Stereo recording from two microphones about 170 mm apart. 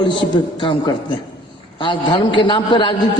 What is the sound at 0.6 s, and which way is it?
A man's voice, 30° left (ahead or behind).